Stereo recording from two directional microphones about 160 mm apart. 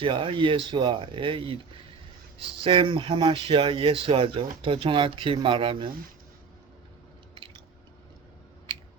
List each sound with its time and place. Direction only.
0.0 s speech: 35° right (ahead or behind)